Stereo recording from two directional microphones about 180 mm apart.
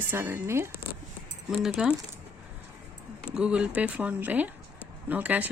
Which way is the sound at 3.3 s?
5° right (ahead or behind).